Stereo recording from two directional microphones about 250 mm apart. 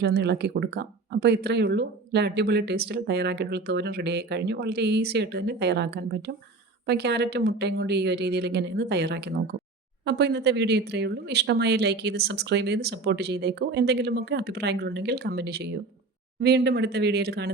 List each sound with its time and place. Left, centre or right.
0.0 s speech: right